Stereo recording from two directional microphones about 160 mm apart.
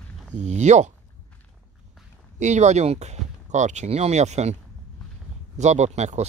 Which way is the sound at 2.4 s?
45° right (ahead or behind).